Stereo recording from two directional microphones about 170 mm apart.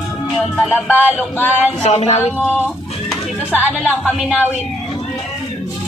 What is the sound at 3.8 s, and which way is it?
Music, 5° left (ahead or behind).